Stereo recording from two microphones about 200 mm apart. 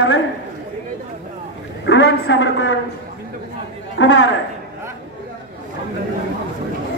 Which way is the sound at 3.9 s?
65° left (ahead or behind).